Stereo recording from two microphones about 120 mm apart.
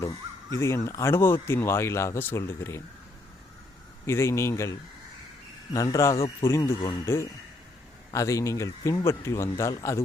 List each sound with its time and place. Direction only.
0.5 s speech: 25° left (ahead or behind)
4.0 s speech: 20° left (ahead or behind)
6.1 s speech: 50° left (ahead or behind)
7.0 s speech: 20° left (ahead or behind)